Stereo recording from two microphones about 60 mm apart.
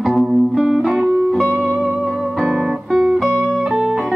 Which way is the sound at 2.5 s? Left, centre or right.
Centre.